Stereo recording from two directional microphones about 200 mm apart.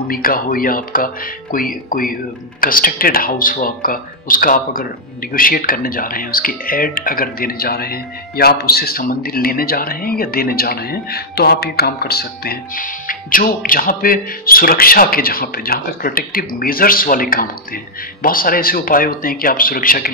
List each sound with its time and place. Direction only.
0.1 s speech: 45° left (ahead or behind)